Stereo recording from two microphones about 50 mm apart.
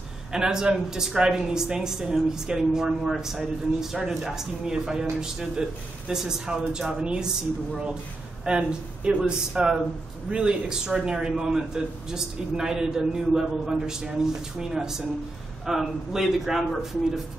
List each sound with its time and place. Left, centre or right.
0.3 s a man's voice: centre
8.5 s a man's voice: centre